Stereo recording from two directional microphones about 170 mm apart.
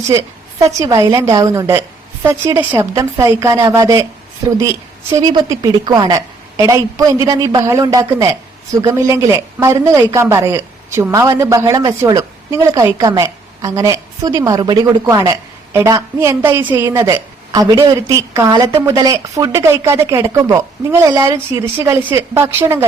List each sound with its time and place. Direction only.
0.8 s a woman's voice: 20° right (ahead or behind)
5.2 s a woman's voice: 25° right (ahead or behind)